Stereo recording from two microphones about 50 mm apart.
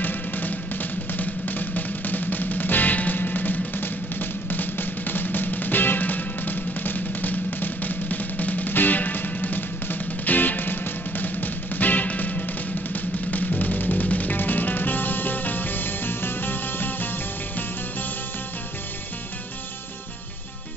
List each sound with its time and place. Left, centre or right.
0.0 s music: left